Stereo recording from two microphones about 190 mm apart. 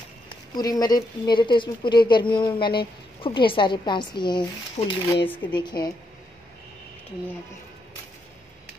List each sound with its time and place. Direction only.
0.6 s a woman's voice: 20° left (ahead or behind)